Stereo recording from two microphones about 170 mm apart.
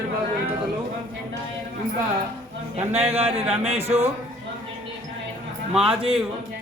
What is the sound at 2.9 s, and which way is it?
Speech, 35° right (ahead or behind).